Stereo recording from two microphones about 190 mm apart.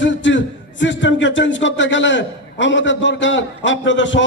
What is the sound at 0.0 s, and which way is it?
Speech, 75° left (ahead or behind).